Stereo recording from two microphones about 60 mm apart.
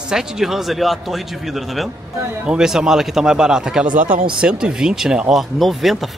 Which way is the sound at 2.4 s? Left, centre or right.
Centre.